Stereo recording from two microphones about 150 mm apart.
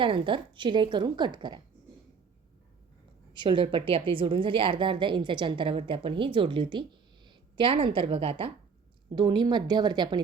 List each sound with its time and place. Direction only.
0.0 s a woman's voice: 35° right (ahead or behind)
3.3 s a woman's voice: 30° right (ahead or behind)